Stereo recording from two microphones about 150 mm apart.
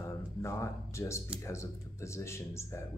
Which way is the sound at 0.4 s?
20° left (ahead or behind).